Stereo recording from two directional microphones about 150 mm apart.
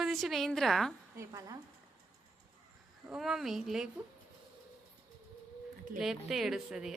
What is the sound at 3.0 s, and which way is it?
Speech, 5° right (ahead or behind).